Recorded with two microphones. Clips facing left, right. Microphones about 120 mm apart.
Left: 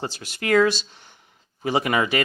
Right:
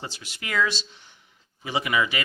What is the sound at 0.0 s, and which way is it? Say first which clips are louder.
Speech: left 8 dB; 50° left (ahead or behind).